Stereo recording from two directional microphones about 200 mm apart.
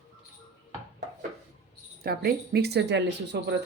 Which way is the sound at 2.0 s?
50° right (ahead or behind).